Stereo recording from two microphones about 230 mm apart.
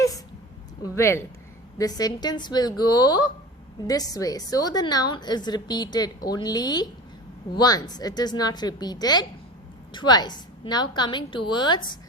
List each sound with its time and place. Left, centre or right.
0.8 s a woman's voice: centre